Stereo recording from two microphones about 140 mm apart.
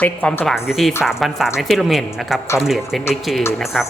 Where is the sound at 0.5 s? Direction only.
Centre (ahead or behind).